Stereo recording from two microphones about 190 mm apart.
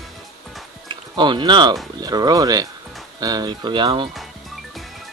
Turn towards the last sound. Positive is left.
turn(degrees=0)  # may be behind; listen again after turning